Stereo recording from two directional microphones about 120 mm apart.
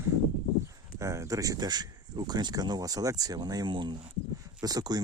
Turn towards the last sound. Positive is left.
turn(degrees=-35)  # may be behind; listen again after turning